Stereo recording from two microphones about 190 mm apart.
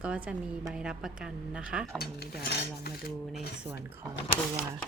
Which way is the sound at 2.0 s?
55° left (ahead or behind).